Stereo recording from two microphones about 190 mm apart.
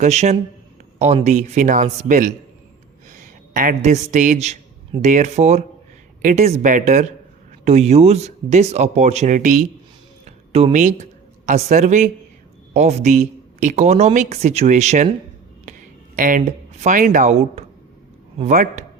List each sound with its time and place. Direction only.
0.0 s a man's voice: 35° right (ahead or behind)
16.1 s a man's voice: 45° right (ahead or behind)